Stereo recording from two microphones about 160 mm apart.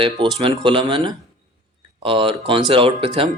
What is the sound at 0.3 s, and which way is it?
Speech, 35° right (ahead or behind).